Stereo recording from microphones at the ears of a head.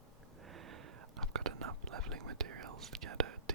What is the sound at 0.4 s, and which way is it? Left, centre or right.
Whispering, right.